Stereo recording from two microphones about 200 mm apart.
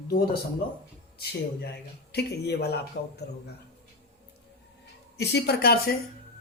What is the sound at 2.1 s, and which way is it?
Speech, 55° left (ahead or behind).